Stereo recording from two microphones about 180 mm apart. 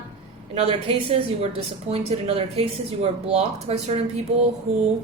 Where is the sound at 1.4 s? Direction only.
35° right (ahead or behind).